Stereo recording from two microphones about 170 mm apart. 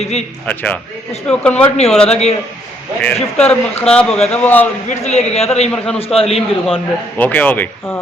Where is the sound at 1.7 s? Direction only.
35° left (ahead or behind).